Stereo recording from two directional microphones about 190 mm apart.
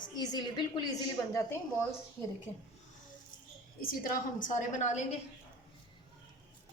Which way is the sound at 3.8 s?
50° left (ahead or behind).